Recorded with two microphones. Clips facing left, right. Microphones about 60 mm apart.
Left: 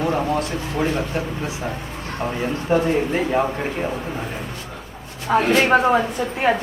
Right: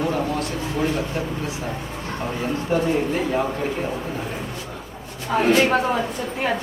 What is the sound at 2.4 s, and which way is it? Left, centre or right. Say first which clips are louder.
Speech: left 2 dB; left.